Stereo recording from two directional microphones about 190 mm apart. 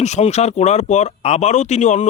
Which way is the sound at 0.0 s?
35° left (ahead or behind).